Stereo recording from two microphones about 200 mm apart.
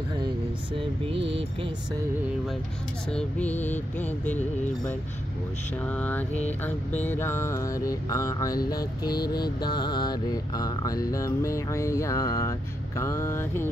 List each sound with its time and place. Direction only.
3.1 s mantra: 5° left (ahead or behind)
5.8 s mantra: 5° left (ahead or behind)